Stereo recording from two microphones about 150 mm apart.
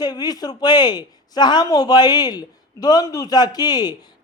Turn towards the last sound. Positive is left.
turn(degrees=25)  # may be behind; listen again after turning